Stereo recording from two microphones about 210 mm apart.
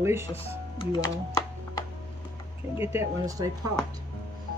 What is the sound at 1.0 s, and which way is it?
Music, 15° left (ahead or behind).